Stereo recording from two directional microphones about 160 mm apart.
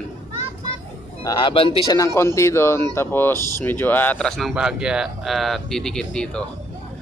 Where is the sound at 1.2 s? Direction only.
20° left (ahead or behind).